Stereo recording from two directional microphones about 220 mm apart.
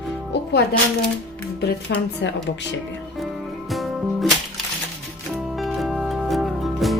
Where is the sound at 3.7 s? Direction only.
Centre (ahead or behind).